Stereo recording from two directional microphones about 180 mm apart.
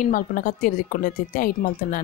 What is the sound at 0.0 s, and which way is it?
Speech, 50° left (ahead or behind).